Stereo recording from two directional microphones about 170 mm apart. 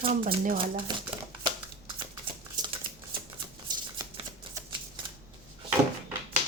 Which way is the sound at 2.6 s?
25° right (ahead or behind).